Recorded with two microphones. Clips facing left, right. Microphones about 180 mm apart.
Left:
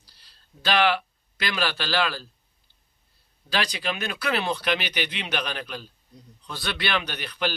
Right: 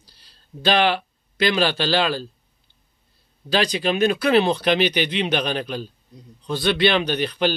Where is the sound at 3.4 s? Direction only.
25° right (ahead or behind).